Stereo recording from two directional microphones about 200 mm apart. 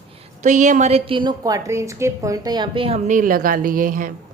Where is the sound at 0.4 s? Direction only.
40° right (ahead or behind).